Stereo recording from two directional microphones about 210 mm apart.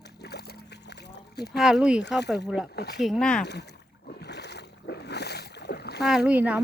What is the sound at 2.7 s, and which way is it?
Speech, 50° left (ahead or behind).